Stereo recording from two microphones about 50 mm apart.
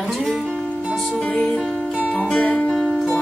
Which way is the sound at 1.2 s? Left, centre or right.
Left.